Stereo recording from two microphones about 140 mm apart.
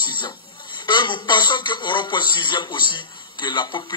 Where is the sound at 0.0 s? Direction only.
35° left (ahead or behind).